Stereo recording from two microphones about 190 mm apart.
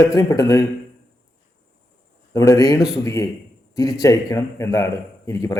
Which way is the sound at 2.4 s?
20° left (ahead or behind).